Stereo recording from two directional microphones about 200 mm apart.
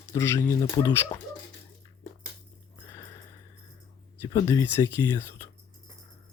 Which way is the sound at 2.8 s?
15° left (ahead or behind).